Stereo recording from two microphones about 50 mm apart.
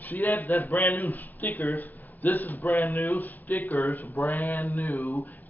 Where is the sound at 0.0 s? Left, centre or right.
Left.